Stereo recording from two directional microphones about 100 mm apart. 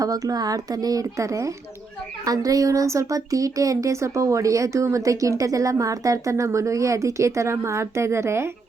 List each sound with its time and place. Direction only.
0.0 s speech: 40° right (ahead or behind)